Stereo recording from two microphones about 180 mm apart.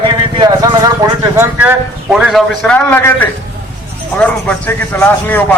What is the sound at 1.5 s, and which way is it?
A man's voice, 5° right (ahead or behind).